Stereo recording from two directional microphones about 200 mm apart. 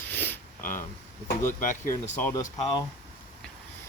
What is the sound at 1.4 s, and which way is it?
Speech, 40° left (ahead or behind).